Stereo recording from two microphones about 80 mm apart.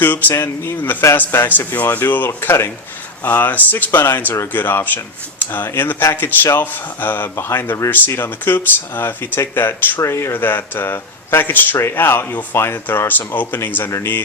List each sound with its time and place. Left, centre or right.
0.0 s speech: left